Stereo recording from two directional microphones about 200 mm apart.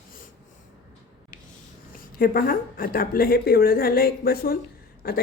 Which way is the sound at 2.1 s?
45° left (ahead or behind).